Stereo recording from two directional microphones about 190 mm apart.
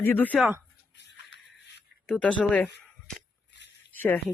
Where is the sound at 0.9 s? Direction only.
70° left (ahead or behind).